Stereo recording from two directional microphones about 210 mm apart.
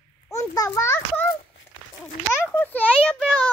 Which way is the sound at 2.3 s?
10° left (ahead or behind).